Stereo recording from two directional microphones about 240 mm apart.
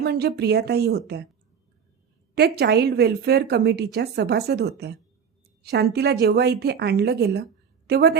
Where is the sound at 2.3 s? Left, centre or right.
Right.